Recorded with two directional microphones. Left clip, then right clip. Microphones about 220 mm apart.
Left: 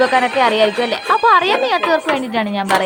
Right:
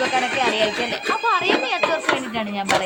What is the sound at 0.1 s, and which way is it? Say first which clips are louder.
A woman's voice: left 6 dB; 30° left (ahead or behind).